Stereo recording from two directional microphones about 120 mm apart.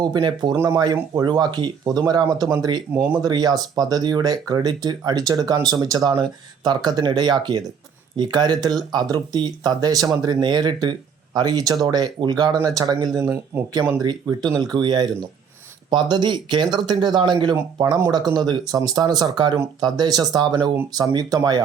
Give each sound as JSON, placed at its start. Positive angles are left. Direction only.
{"t": 0.0, "sound": "speech", "side_deg": -35}
{"t": 0.5, "sound": "speech", "side_deg": -25}
{"t": 0.8, "sound": "speech", "side_deg": -35}